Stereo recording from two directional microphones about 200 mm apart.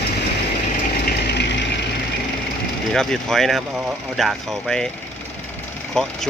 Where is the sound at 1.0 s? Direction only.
60° left (ahead or behind).